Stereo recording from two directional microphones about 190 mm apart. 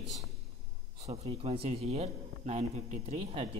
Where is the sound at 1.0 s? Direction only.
30° right (ahead or behind).